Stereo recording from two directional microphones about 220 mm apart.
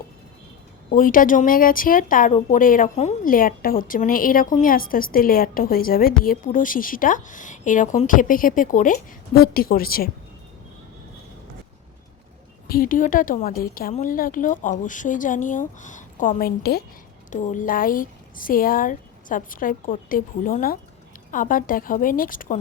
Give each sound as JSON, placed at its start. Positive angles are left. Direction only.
{"t": 0.9, "sound": "speech", "side_deg": 40}
{"t": 12.6, "sound": "speech", "side_deg": 40}